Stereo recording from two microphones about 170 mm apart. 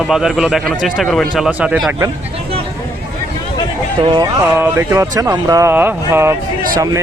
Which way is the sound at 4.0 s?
25° right (ahead or behind).